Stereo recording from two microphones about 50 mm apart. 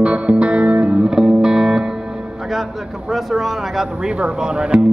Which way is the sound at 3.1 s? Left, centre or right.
Centre.